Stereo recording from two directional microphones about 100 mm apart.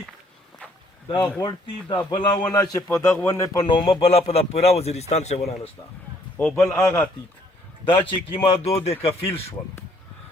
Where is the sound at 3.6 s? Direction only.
55° left (ahead or behind); by 5.7 s 90° left.